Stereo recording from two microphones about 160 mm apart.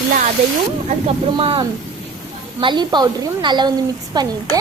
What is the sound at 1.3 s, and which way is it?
A woman's voice, 35° right (ahead or behind).